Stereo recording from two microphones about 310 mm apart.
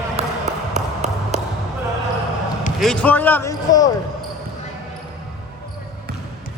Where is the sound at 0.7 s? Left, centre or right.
Right.